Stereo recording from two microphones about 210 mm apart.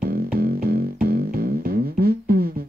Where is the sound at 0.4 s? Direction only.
45° right (ahead or behind).